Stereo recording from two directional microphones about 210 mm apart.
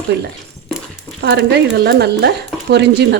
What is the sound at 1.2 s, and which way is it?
Speech, 50° right (ahead or behind).